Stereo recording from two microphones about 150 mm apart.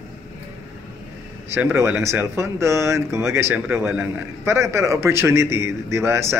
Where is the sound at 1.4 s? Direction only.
15° right (ahead or behind).